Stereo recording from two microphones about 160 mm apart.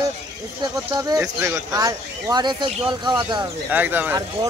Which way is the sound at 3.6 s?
10° right (ahead or behind).